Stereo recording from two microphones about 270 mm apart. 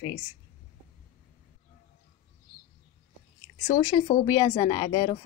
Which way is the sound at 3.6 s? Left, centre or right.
Centre.